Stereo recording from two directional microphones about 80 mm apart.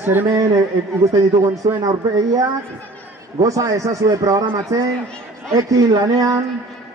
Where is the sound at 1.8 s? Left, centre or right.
Right.